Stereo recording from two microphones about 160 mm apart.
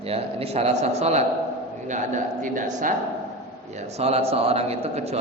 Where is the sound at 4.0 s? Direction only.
40° right (ahead or behind).